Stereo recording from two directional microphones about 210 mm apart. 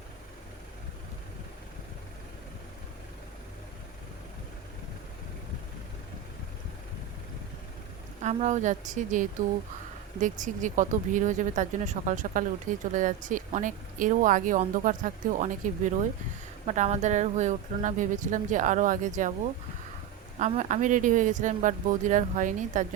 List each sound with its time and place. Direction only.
8.2 s speech: 30° right (ahead or behind)
20.4 s speech: 35° right (ahead or behind)